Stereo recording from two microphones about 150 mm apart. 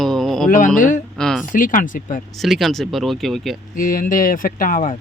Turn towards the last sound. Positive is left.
turn(degrees=65)  # may be behind; listen again after turning